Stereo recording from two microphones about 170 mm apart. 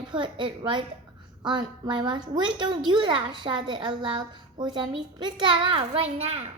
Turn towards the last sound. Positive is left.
turn(degrees=-35)  # may be behind; listen again after turning